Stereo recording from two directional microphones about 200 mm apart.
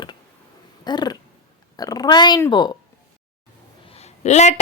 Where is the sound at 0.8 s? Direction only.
20° left (ahead or behind).